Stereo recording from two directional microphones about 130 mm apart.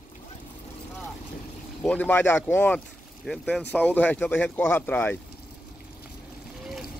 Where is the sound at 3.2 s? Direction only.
Centre (ahead or behind).